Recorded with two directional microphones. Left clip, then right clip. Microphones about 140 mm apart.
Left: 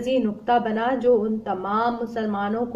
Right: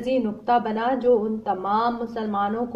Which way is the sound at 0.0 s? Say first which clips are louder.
Left 1 dB; 10° left (ahead or behind).